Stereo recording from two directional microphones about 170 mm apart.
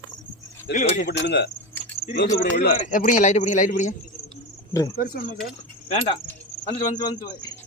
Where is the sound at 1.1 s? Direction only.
80° left.